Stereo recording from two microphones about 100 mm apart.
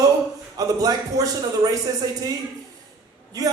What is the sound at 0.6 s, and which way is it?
A man's voice, 40° right (ahead or behind).